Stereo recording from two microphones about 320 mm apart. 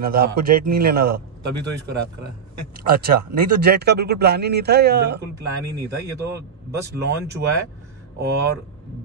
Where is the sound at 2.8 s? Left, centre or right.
Right.